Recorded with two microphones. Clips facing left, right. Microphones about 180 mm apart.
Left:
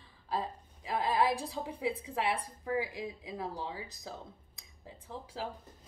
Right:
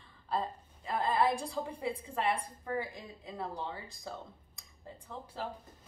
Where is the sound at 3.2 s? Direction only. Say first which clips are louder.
Left 1 dB; 10° left (ahead or behind).